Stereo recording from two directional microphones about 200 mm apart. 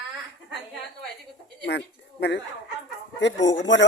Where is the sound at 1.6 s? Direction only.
55° left (ahead or behind).